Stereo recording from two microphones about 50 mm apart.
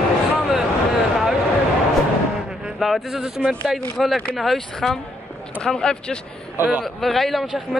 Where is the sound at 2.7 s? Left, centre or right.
Centre.